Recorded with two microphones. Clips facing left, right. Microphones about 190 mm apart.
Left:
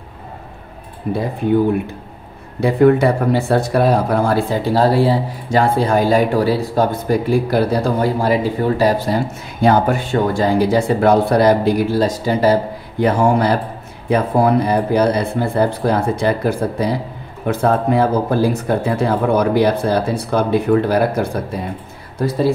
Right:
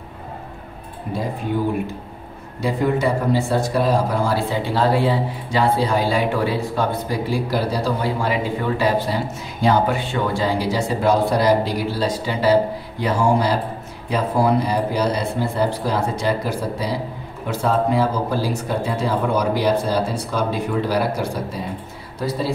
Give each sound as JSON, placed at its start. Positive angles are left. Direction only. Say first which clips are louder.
{"t": 2.6, "sound": "speech", "louder": "left 8 dB", "side_deg": 60}
{"t": 13.0, "sound": "speech", "louder": "left 4 dB", "side_deg": 55}